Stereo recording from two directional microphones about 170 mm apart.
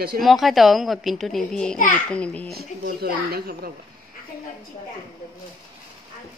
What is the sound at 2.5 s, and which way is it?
A man's voice, 65° right (ahead or behind).